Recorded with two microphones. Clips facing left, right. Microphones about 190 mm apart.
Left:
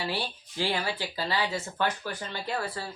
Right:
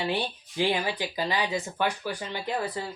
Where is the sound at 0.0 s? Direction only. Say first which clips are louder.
Right 3 dB; 20° right (ahead or behind).